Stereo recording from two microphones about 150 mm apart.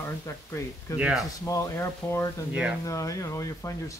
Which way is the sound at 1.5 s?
20° left (ahead or behind).